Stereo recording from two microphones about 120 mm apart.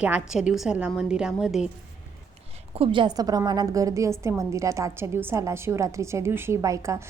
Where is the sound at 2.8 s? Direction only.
45° right (ahead or behind).